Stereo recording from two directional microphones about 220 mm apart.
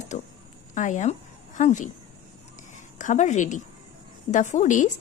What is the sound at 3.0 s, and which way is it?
A woman's voice, 35° left (ahead or behind).